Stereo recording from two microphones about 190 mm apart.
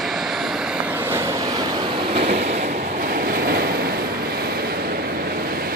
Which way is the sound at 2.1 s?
60° right (ahead or behind).